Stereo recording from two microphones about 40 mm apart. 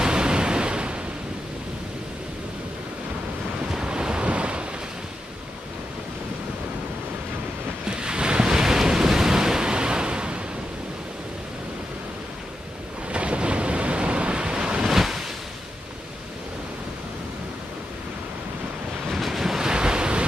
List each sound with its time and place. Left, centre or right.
0.0 s waves: right
3.7 s waves: right
7.9 s waves: right
13.1 s waves: right
14.9 s waves: centre
19.1 s waves: centre
19.7 s waves: right